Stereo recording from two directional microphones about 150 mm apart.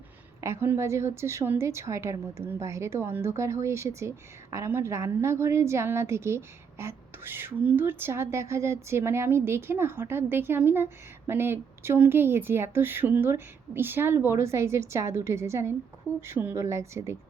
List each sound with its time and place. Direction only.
0.4 s a woman's voice: 15° right (ahead or behind)